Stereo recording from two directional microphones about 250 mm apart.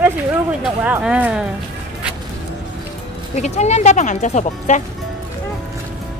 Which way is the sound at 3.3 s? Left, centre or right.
Left.